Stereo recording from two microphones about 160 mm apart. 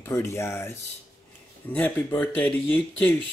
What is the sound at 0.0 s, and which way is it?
Speech, 15° left (ahead or behind).